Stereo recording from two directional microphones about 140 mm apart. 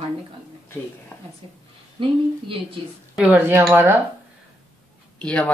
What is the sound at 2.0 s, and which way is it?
Speech, 40° right (ahead or behind).